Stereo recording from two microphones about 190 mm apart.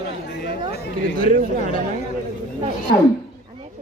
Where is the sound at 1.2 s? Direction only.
45° right (ahead or behind).